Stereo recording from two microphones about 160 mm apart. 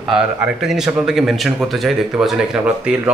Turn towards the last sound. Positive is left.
turn(degrees=-10)  # may be behind; listen again after turning